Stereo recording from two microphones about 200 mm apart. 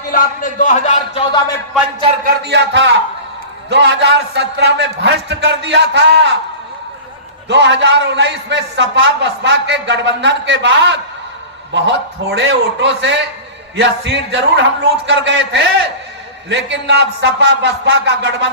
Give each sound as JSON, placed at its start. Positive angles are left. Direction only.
{"t": 0.1, "sound": "speech", "side_deg": 45}
{"t": 2.2, "sound": "a man's voice", "side_deg": -55}
{"t": 7.4, "sound": "a man's voice", "side_deg": -60}